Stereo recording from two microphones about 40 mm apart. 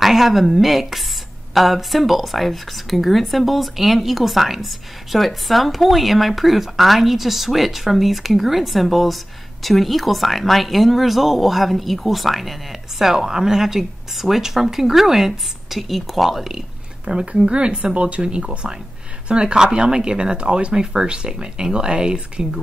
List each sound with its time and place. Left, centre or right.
0.0 s speech: centre
17.0 s speech: right
19.4 s speech: centre